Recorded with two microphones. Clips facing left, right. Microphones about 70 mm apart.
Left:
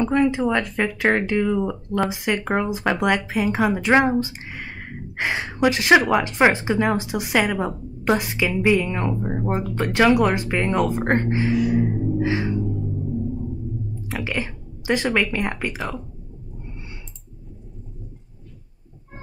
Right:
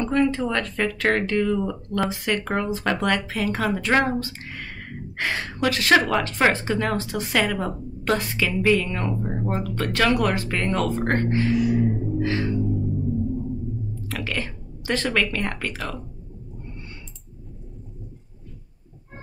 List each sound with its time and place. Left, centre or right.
0.0 s speech: centre
14.0 s a sound: centre
15.3 s speech: centre